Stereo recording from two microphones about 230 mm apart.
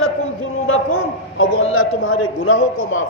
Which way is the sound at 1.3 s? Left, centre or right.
Left.